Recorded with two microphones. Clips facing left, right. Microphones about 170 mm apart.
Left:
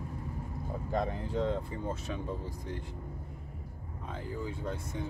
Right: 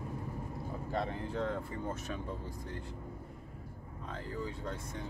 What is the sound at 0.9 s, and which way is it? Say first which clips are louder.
Speech: left 3 dB; 15° left (ahead or behind).